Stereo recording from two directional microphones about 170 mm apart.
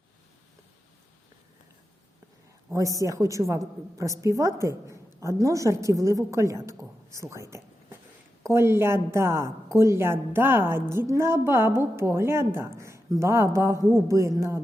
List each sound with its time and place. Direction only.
2.7 s a woman's voice: 20° right (ahead or behind)